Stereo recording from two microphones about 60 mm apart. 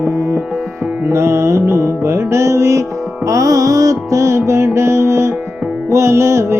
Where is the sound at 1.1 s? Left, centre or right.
Right.